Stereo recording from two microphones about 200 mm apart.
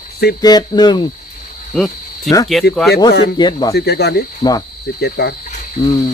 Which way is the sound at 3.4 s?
20° left (ahead or behind).